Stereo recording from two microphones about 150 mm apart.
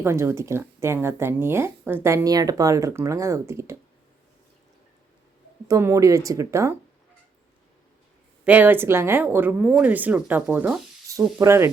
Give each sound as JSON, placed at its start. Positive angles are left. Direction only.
{"t": 0.0, "sound": "speech", "side_deg": -15}
{"t": 5.6, "sound": "speech", "side_deg": -20}
{"t": 8.4, "sound": "speech", "side_deg": -10}